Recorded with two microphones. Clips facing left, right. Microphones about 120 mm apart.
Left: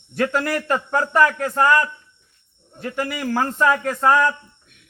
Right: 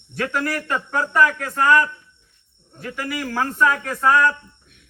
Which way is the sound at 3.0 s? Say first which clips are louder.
Left 2 dB; 25° left (ahead or behind).